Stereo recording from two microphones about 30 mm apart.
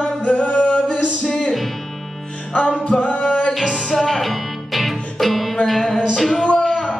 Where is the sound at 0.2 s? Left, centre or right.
Left.